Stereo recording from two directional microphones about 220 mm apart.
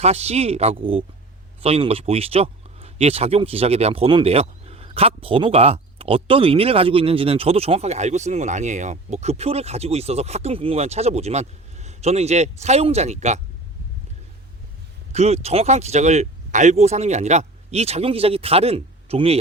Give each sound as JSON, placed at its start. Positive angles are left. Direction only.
{"t": 0.0, "sound": "speech", "side_deg": -30}
{"t": 15.1, "sound": "speech", "side_deg": -30}